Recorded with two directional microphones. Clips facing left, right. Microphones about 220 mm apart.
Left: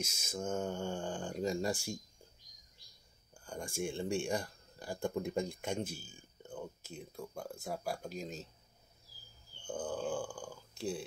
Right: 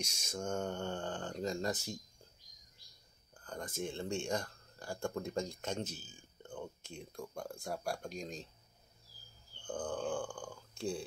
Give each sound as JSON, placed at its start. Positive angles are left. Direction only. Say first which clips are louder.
{"t": 0.0, "sound": "speech", "louder": "left 1 dB", "side_deg": 5}
{"t": 3.3, "sound": "speech", "louder": "left 2 dB", "side_deg": 10}
{"t": 9.6, "sound": "speech", "louder": "even", "side_deg": 10}